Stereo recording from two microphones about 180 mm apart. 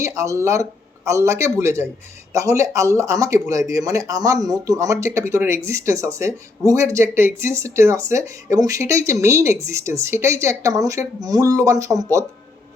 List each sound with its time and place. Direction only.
0.0 s speech: 15° right (ahead or behind)